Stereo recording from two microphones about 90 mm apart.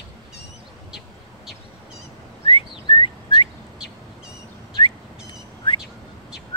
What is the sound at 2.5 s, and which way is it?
Whistling, 85° left.